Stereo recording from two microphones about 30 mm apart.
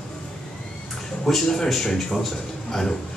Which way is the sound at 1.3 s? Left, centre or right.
Centre.